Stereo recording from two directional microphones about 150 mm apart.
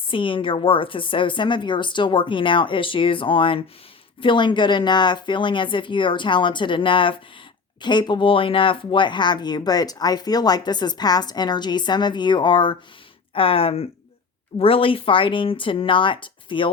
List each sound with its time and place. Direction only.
0.1 s a woman's voice: 35° left (ahead or behind)